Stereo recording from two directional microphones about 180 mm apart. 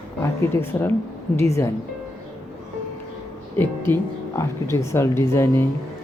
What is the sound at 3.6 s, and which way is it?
Speech, 10° left (ahead or behind).